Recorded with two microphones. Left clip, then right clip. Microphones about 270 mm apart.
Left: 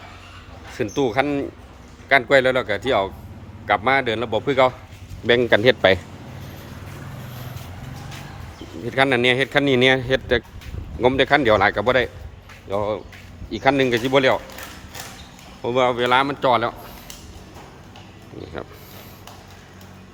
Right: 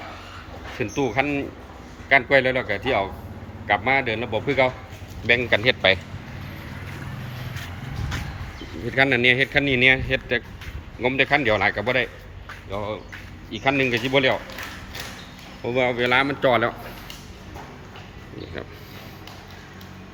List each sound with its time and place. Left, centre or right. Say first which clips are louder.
0.9 s speech: left 3 dB; centre
8.9 s speech: left 1 dB; centre
15.6 s speech: left 3 dB; centre